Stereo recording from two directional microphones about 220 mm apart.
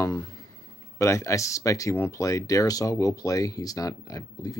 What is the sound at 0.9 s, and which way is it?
Speech, 15° left (ahead or behind).